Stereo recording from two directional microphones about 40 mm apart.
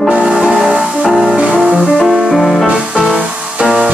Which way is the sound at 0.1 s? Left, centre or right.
Right.